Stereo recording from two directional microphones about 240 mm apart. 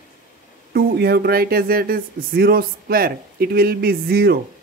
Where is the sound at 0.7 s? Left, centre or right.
Right.